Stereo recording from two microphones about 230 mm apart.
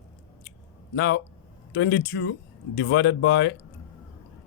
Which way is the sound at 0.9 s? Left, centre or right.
Left.